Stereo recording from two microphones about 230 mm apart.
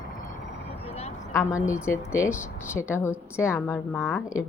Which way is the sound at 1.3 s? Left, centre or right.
Centre.